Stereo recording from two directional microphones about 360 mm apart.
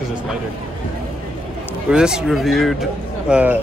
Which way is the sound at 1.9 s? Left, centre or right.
Centre.